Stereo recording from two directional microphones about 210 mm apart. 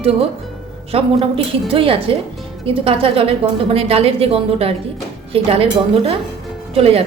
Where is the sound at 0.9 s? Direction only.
30° right (ahead or behind).